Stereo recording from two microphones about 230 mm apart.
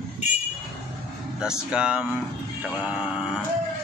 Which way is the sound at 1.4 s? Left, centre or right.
Centre.